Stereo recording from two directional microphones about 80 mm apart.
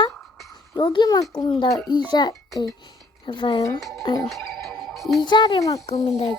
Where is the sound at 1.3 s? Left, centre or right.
Left.